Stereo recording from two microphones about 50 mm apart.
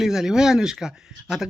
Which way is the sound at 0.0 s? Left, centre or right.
Centre.